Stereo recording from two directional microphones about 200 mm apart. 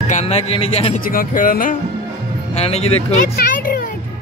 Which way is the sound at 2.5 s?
30° left (ahead or behind).